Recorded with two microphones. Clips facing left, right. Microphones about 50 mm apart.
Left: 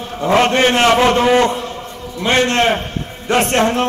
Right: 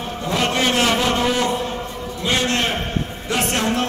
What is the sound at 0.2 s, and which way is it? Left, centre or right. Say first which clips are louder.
A man's voice: left 8 dB; left.